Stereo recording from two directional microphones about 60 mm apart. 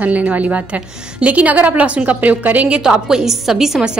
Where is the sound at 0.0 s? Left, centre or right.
Right.